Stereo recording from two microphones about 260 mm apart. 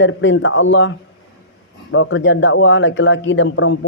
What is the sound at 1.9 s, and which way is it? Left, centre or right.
Speech, left.